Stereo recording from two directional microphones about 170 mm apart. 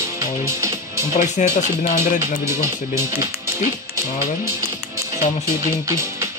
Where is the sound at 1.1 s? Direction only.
45° left (ahead or behind).